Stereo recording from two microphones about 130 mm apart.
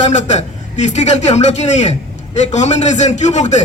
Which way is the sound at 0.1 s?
65° left (ahead or behind).